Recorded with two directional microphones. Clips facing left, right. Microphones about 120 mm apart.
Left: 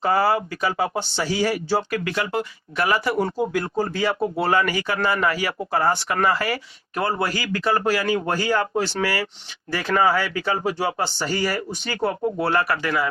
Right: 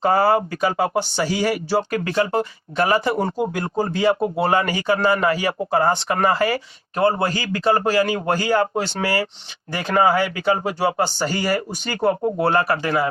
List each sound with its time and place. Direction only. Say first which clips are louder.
0.0 s speech: right 3 dB; 30° right (ahead or behind)
1.9 s a man's voice: right 4 dB; 35° right (ahead or behind)
10.7 s speech: right 3 dB; 40° right (ahead or behind)
12.4 s a man's voice: right 3 dB; 25° right (ahead or behind)